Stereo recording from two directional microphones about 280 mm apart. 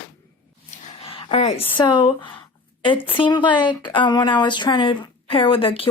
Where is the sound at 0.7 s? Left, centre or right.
Centre.